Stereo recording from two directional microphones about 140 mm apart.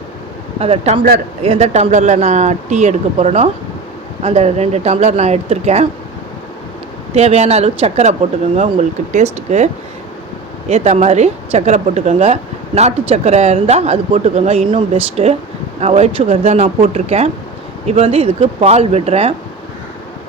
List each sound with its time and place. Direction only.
0.6 s a woman's voice: 45° right (ahead or behind)
7.1 s a woman's voice: 50° right (ahead or behind)
10.7 s a woman's voice: 50° right (ahead or behind)